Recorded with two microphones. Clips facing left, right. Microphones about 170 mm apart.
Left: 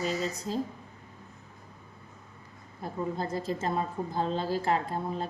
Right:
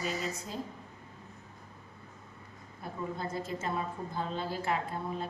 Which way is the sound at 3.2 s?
35° left (ahead or behind).